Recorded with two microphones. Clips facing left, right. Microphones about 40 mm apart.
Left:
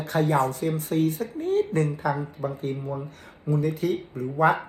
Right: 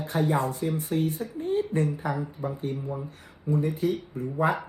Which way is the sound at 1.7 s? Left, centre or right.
Left.